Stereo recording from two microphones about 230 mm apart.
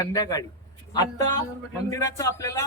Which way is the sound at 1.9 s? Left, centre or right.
Centre.